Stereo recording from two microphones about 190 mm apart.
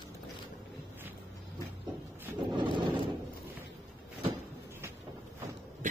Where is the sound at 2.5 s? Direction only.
25° right (ahead or behind).